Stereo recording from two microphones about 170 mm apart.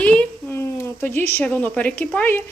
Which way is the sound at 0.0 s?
5° left (ahead or behind).